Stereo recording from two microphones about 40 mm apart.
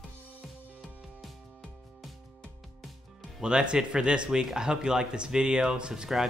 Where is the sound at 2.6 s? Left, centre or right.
Centre.